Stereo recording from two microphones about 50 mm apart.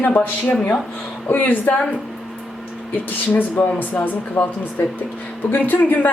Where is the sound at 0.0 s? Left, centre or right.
Left.